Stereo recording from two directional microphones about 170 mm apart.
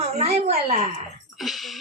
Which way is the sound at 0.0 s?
40° right (ahead or behind).